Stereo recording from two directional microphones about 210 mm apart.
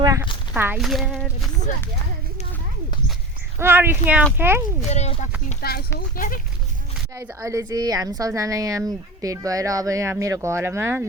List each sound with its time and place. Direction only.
0.0 s a sound: 15° right (ahead or behind)
0.5 s speech: 10° right (ahead or behind)
3.6 s speech: 10° right (ahead or behind)
4.9 s speech: 30° left (ahead or behind)
5.6 s speech: 45° left (ahead or behind)
7.2 s speech: 15° right (ahead or behind)